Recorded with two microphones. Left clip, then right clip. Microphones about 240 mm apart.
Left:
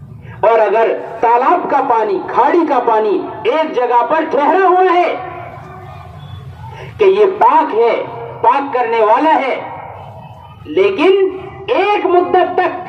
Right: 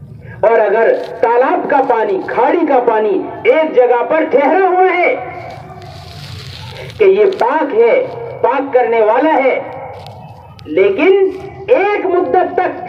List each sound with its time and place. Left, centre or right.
0.4 s a man's voice: left
7.0 s a man's voice: left
10.8 s a man's voice: left